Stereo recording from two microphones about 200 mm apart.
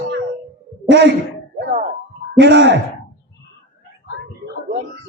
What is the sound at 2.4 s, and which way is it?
Speech, 60° right (ahead or behind).